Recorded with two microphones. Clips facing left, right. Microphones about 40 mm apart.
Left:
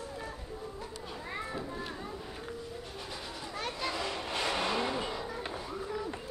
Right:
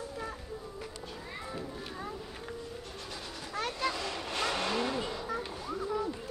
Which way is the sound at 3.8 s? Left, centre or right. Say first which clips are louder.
Right 1 dB; centre.